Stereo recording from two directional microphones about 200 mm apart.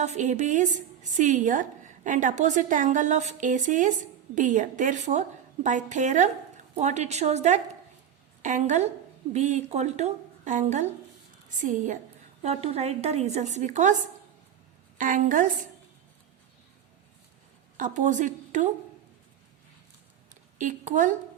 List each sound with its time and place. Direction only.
0.0 s a woman's voice: 35° right (ahead or behind)
14.9 s a woman's voice: 40° right (ahead or behind)
17.7 s a woman's voice: 40° right (ahead or behind)
20.3 s a woman's voice: 40° right (ahead or behind)